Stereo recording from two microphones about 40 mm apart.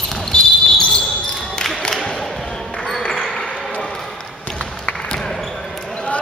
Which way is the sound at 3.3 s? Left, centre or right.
Centre.